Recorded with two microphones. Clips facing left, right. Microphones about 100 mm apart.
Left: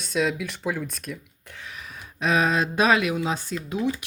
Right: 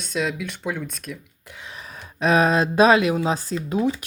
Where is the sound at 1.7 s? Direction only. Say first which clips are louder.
Right 2 dB; 35° right (ahead or behind).